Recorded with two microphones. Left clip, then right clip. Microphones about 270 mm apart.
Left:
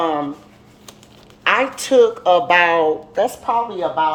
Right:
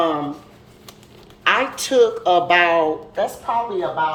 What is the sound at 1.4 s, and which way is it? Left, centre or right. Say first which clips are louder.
Speech: left 1 dB; centre.